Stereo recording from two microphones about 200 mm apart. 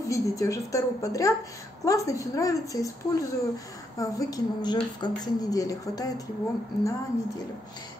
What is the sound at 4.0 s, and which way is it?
Speech, 15° left (ahead or behind).